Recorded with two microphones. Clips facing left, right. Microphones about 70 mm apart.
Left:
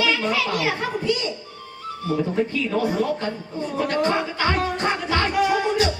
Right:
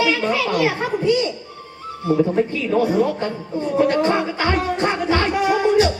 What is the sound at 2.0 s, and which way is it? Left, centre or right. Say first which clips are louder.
Music: right 5 dB; right.